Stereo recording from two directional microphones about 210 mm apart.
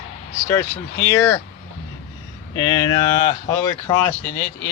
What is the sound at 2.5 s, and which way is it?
Speech, 20° left (ahead or behind).